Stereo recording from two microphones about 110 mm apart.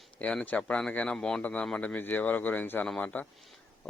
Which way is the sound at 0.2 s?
10° left (ahead or behind).